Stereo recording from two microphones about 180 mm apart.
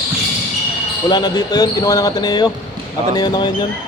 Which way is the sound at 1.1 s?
20° left (ahead or behind).